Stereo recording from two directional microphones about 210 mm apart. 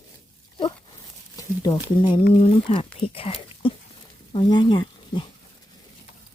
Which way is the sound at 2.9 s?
25° left (ahead or behind).